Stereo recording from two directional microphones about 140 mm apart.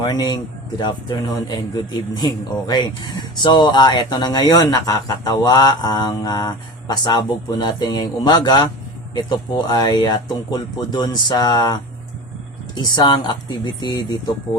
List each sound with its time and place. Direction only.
0.0 s a man's voice: 30° left (ahead or behind)